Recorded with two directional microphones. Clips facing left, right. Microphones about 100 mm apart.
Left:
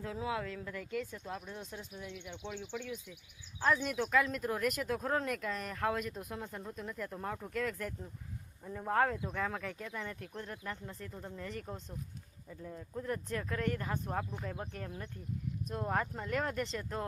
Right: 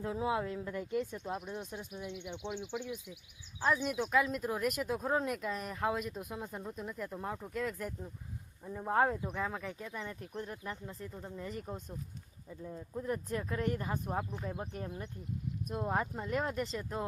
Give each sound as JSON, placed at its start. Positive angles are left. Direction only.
{"t": 0.0, "sound": "speech", "side_deg": -25}
{"t": 15.7, "sound": "speech", "side_deg": -15}